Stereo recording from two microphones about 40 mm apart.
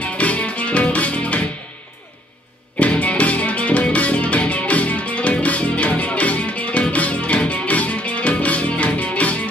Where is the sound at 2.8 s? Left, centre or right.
Left.